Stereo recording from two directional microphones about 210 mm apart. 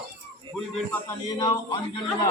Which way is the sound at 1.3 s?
20° left (ahead or behind).